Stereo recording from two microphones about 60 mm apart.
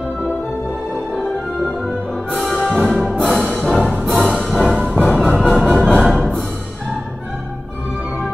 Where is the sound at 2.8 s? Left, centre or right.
Centre.